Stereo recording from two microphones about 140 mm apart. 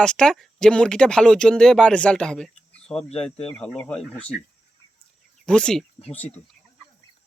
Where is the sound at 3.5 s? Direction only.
5° left (ahead or behind).